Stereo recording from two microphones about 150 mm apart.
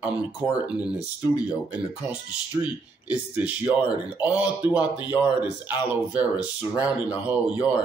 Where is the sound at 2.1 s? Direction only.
10° right (ahead or behind).